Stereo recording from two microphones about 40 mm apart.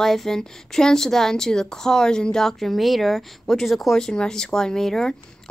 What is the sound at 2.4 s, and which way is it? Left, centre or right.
Speech, centre.